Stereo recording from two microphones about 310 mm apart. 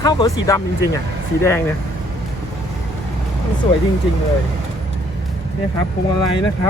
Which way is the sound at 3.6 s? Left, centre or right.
Centre.